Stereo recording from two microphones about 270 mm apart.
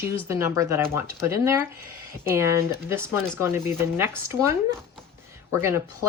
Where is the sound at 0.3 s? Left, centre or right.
Centre.